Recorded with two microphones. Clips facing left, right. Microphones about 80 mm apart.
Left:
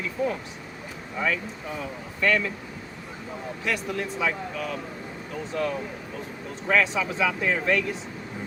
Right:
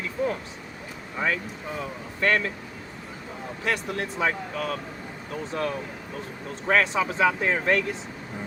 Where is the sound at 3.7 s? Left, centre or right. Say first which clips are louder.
Right 1 dB; right.